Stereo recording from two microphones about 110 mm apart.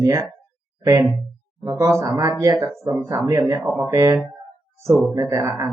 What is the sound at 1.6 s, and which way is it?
Speech, 30° right (ahead or behind).